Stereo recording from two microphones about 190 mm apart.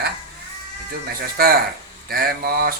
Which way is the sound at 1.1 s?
55° right (ahead or behind).